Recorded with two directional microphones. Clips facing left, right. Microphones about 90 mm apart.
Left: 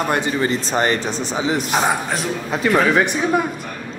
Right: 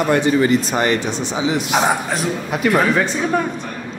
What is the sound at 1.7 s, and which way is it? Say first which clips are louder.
Speech: right 1 dB; centre (ahead or behind).